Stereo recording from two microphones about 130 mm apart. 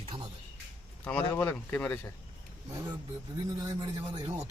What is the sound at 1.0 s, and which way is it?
Speech, 10° left (ahead or behind).